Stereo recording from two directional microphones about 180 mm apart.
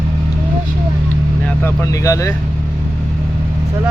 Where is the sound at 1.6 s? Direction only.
15° left (ahead or behind).